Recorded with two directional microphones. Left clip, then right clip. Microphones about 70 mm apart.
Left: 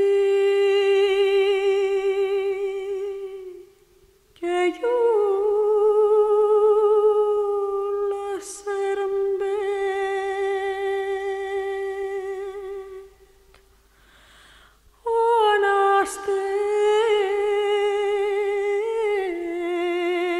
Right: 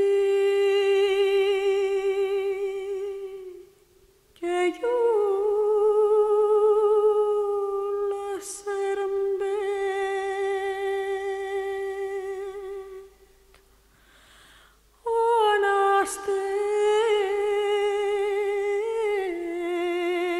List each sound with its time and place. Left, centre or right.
0.0 s humming: right
4.4 s humming: right
15.0 s a sound: right